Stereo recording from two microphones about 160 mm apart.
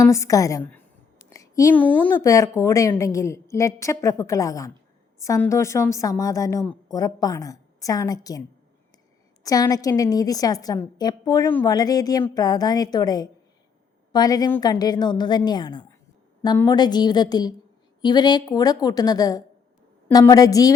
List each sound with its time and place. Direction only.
0.0 s a woman's voice: 20° left (ahead or behind)
2.2 s a woman's voice: 20° left (ahead or behind)